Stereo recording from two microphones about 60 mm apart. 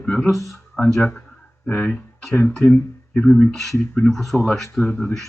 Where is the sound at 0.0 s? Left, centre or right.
Centre.